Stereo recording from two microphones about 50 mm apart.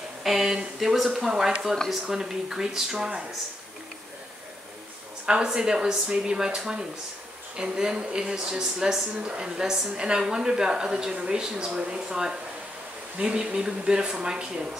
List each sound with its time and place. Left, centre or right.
0.2 s speech: centre
5.2 s speech: centre